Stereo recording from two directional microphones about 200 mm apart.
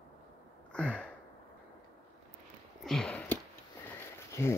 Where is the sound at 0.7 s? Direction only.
5° left (ahead or behind).